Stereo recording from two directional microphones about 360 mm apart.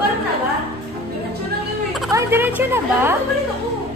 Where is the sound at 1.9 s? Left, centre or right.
Centre.